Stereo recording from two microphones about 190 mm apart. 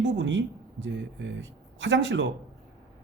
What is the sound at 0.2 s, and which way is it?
Speech, 75° right (ahead or behind).